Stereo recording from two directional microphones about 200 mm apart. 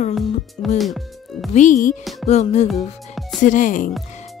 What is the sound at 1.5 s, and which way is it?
Speech, 40° left (ahead or behind).